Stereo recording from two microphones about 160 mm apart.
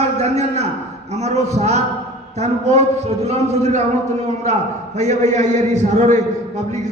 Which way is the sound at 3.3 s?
45° right (ahead or behind).